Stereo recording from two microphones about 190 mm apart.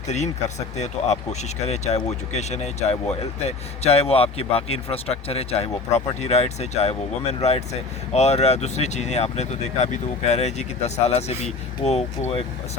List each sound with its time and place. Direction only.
0.1 s speech: 35° left (ahead or behind)